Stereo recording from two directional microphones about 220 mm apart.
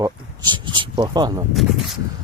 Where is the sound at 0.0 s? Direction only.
20° right (ahead or behind).